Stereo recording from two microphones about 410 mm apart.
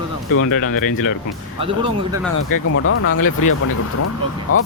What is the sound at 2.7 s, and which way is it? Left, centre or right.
Speech, left.